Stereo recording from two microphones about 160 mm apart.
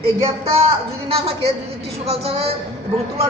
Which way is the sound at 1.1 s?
40° right (ahead or behind).